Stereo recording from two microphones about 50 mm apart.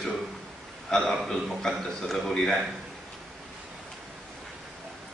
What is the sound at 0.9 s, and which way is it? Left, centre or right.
A man's voice, centre.